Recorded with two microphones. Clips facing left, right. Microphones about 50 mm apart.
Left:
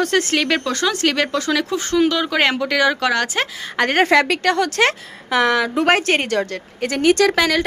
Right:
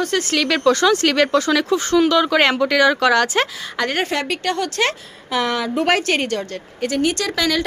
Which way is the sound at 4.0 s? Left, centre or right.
Left.